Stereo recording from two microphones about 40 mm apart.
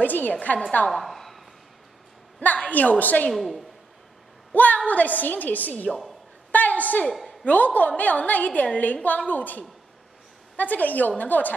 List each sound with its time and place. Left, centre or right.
0.0 s a woman's voice: left
0.8 s a sound: centre
2.4 s a woman's voice: left
3.3 s a woman's voice: centre
4.8 s a woman's voice: left
6.5 s a sound: left
7.1 s a woman's voice: centre
7.4 s a woman's voice: left